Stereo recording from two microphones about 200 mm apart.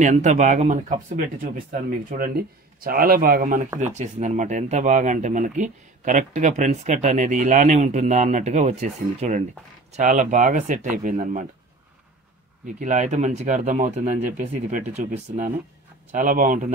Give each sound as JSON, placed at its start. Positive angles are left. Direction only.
{"t": 0.0, "sound": "speech", "side_deg": -35}
{"t": 12.7, "sound": "speech", "side_deg": -35}